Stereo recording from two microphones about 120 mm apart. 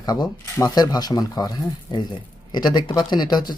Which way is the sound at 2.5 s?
35° left (ahead or behind).